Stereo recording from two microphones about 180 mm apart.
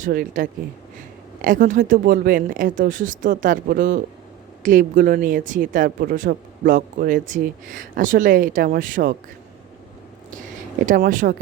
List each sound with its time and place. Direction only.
0.0 s speech: 50° right (ahead or behind)
10.8 s speech: 50° right (ahead or behind)